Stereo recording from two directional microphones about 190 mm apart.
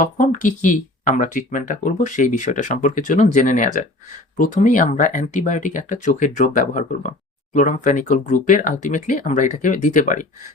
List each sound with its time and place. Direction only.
0.0 s speech: 40° left (ahead or behind)